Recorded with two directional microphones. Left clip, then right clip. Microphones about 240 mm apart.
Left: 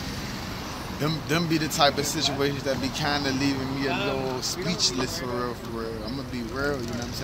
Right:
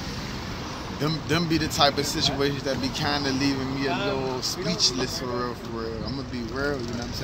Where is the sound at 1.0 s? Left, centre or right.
Centre.